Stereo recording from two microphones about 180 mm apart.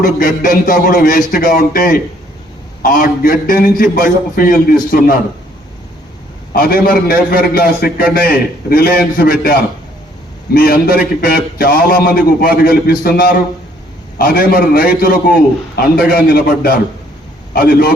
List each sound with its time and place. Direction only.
0.0 s a man's voice: 50° left (ahead or behind)
6.5 s a man's voice: 55° left (ahead or behind)